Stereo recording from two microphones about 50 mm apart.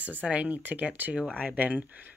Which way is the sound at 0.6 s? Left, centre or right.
Right.